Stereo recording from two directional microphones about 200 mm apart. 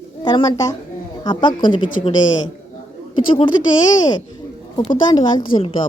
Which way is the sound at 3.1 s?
25° left (ahead or behind).